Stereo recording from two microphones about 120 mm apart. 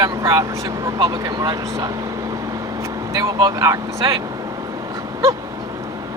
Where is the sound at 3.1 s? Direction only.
30° right (ahead or behind).